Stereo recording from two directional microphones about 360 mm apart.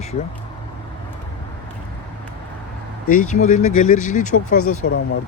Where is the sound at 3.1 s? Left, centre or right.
Left.